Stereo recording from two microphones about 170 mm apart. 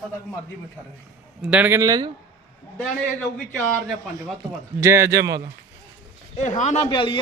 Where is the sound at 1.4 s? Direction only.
10° right (ahead or behind).